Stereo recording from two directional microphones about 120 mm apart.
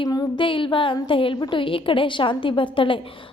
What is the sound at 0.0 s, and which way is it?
A woman's voice, 35° left (ahead or behind).